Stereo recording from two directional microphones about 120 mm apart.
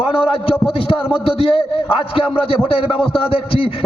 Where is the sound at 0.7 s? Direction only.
50° left (ahead or behind).